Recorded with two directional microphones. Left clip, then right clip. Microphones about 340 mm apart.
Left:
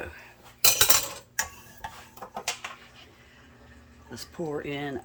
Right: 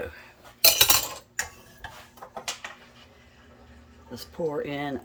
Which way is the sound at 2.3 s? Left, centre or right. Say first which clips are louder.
Left 2 dB; left.